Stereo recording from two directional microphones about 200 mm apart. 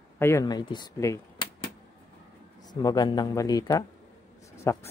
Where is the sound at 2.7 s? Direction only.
20° left (ahead or behind).